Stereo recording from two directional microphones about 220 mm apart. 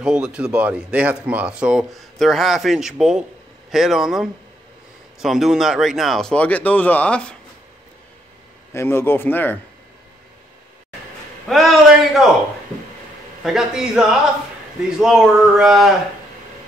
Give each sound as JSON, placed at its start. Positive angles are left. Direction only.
{"t": 0.0, "sound": "speech", "side_deg": -5}
{"t": 8.7, "sound": "a man's voice", "side_deg": 10}
{"t": 11.4, "sound": "speech", "side_deg": 0}
{"t": 13.4, "sound": "speech", "side_deg": 0}